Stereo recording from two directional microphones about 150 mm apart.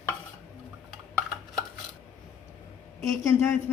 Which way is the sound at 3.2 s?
15° left (ahead or behind).